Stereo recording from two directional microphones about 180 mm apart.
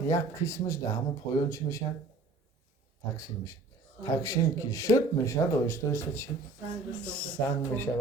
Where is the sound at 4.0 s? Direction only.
20° left (ahead or behind).